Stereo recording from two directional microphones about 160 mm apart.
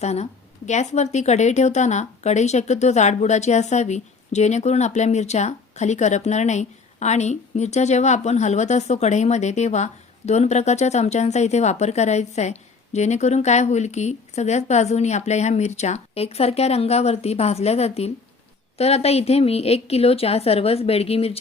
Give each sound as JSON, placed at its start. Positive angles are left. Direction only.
{"t": 0.0, "sound": "a woman's voice", "side_deg": 45}